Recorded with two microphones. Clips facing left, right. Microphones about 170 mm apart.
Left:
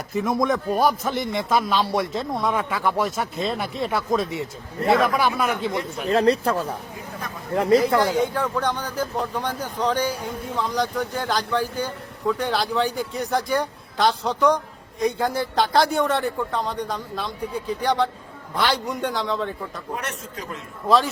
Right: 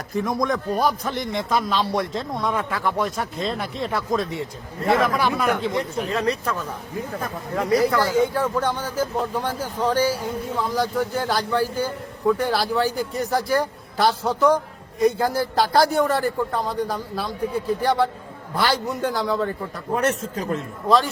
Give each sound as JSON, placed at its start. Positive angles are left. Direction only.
{"t": 0.2, "sound": "speech", "side_deg": 5}
{"t": 6.1, "sound": "speech", "side_deg": 35}
{"t": 8.3, "sound": "speech", "side_deg": -5}
{"t": 20.0, "sound": "a man's voice", "side_deg": -40}
{"t": 20.8, "sound": "speech", "side_deg": 0}